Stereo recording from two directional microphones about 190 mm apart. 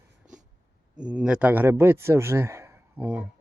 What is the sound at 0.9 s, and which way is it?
Speech, 5° right (ahead or behind).